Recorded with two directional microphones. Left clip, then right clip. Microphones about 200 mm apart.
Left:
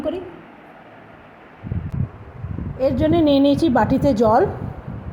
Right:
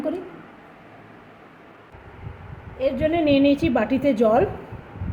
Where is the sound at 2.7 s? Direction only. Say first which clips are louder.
Left 4 dB; 25° left (ahead or behind).